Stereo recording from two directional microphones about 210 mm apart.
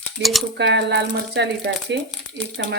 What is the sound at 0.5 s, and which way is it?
A woman's voice, 55° right (ahead or behind).